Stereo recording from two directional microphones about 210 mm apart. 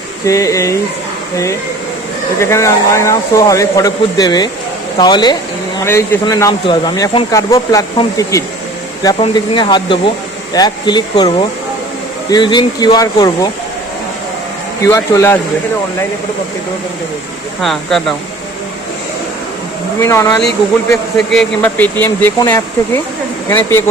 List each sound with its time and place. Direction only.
0.3 s speech: 15° left (ahead or behind)
2.4 s speech: 15° left (ahead or behind)
14.8 s speech: 15° left (ahead or behind)
17.6 s speech: centre (ahead or behind)
20.0 s speech: 15° left (ahead or behind)